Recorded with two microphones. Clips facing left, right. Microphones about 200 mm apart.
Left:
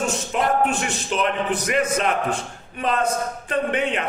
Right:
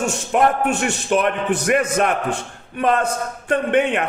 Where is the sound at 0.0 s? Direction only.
65° right (ahead or behind).